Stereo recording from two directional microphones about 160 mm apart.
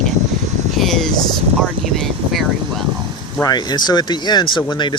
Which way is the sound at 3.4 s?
25° left (ahead or behind).